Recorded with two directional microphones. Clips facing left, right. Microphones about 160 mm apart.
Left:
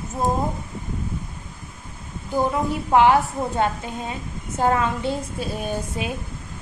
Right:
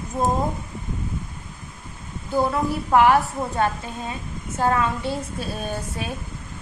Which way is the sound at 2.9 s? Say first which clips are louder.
Left 1 dB; 20° left (ahead or behind).